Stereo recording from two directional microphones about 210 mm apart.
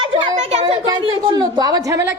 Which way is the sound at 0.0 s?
25° right (ahead or behind).